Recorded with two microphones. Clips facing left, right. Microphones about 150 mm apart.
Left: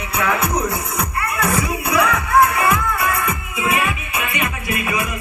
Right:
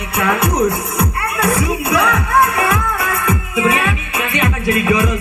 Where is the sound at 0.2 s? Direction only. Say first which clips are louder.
Right 5 dB; 70° right (ahead or behind).